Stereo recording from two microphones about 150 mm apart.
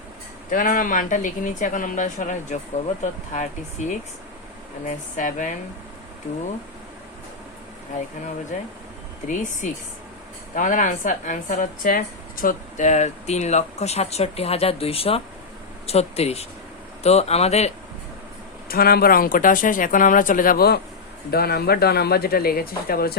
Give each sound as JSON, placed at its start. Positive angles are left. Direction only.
{"t": 0.5, "sound": "speech", "side_deg": 65}
{"t": 9.2, "sound": "speech", "side_deg": 55}
{"t": 18.7, "sound": "speech", "side_deg": 90}